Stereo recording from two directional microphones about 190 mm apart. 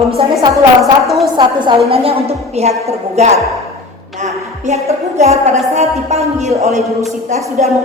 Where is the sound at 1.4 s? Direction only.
25° right (ahead or behind).